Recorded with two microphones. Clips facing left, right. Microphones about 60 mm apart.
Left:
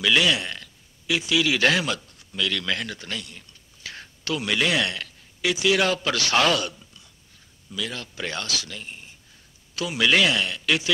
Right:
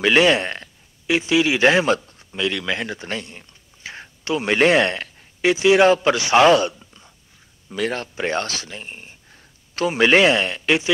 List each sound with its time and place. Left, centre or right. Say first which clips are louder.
0.0 s speech: right 6 dB; right
7.7 s speech: right 8 dB; right